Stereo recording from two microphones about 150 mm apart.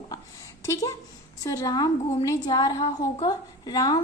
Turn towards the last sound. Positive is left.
turn(degrees=25)  # may be behind; listen again after turning